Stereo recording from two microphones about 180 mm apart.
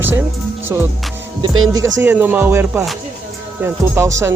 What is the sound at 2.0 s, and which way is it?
Music, 10° right (ahead or behind).